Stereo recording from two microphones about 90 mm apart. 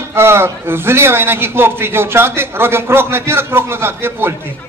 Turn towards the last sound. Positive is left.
turn(degrees=-25)  # may be behind; listen again after turning